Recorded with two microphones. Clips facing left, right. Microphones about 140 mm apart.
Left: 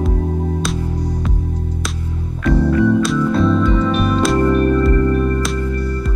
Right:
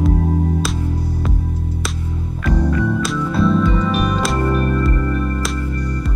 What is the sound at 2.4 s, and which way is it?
Music, centre (ahead or behind).